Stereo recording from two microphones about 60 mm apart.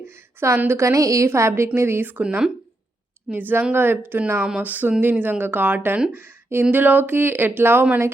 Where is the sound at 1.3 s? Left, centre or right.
Right.